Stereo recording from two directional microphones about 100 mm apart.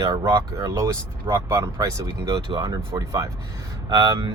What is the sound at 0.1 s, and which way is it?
Speech, 35° right (ahead or behind).